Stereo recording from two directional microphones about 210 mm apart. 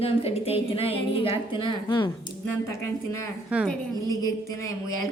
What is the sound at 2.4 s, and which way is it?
Speech, 10° left (ahead or behind).